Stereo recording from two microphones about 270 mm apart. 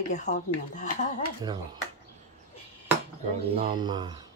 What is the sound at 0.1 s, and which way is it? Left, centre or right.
Speech, left.